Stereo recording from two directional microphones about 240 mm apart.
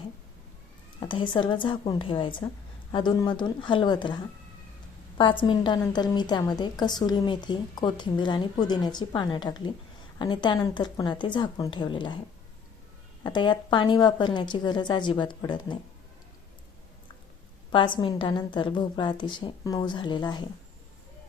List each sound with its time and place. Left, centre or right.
0.9 s a woman's voice: centre
13.2 s a woman's voice: centre
17.7 s a woman's voice: centre